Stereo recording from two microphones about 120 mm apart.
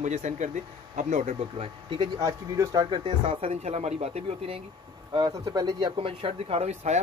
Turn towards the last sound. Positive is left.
turn(degrees=-60)  # may be behind; listen again after turning